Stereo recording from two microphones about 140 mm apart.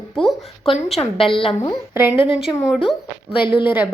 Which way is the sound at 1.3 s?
40° left (ahead or behind).